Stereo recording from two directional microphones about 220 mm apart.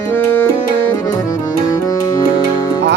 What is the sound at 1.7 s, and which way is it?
Music, 15° left (ahead or behind).